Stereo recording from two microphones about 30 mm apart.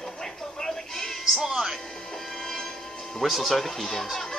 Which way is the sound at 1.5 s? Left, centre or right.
Centre.